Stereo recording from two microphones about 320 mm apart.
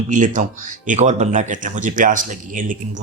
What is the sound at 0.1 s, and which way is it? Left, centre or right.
Speech, right.